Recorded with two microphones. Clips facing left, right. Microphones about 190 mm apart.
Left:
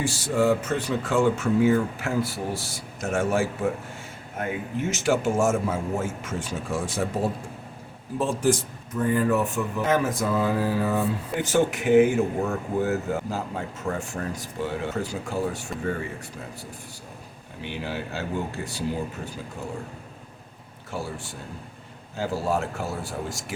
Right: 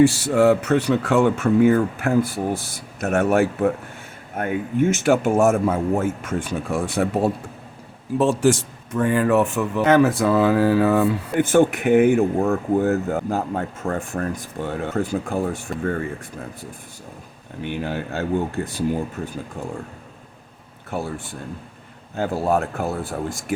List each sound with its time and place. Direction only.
0.0 s speech: 65° right (ahead or behind)
8.2 s speech: 80° right; by 15.6 s 55° right (ahead or behind)
17.6 s speech: 50° right (ahead or behind)
20.9 s speech: 55° right (ahead or behind)